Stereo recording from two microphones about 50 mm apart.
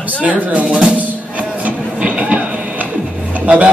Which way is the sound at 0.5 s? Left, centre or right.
Right.